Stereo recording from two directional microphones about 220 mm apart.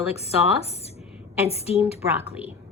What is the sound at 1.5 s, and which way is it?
Speech, 30° left (ahead or behind).